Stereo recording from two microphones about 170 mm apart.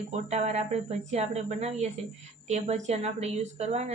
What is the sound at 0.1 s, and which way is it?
A woman's voice, 40° right (ahead or behind).